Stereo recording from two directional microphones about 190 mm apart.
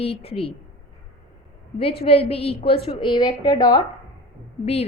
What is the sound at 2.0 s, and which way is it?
A woman's voice, 30° left (ahead or behind).